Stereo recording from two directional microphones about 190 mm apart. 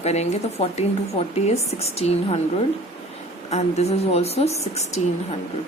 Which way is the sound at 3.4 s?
35° left (ahead or behind).